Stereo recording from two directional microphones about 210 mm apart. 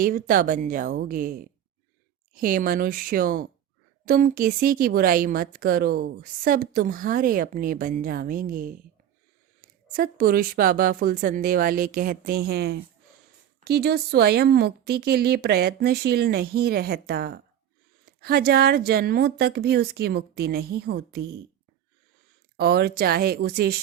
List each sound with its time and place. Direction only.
0.0 s a woman's voice: 40° right (ahead or behind)
22.5 s a woman's voice: 50° right (ahead or behind)